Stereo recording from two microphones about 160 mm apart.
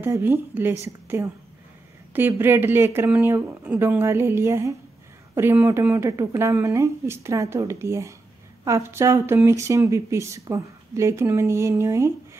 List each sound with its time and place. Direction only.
0.0 s speech: 15° right (ahead or behind)